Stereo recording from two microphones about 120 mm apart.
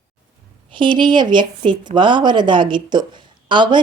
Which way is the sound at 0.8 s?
40° right (ahead or behind).